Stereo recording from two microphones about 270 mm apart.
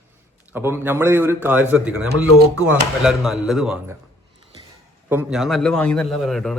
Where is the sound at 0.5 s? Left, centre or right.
Centre.